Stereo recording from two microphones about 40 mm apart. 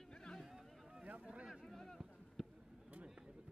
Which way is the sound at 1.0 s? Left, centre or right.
Right.